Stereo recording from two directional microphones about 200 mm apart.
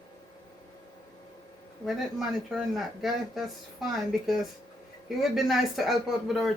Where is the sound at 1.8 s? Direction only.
Centre (ahead or behind).